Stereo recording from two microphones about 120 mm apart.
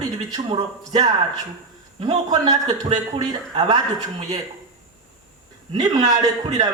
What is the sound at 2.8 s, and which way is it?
Speech, 55° right (ahead or behind).